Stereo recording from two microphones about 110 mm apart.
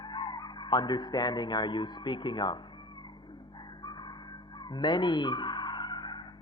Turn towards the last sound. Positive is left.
turn(degrees=40)  # may be behind; listen again after turning